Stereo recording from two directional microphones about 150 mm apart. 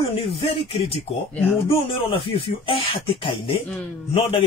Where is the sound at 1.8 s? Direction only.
35° left (ahead or behind).